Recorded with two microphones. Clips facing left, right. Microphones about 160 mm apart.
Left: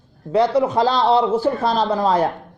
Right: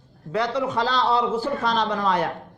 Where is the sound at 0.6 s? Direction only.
35° left (ahead or behind).